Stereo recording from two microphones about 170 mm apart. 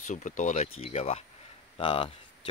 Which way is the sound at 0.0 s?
45° left (ahead or behind).